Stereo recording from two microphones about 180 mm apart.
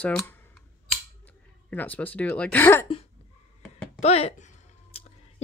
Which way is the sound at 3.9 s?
35° left (ahead or behind).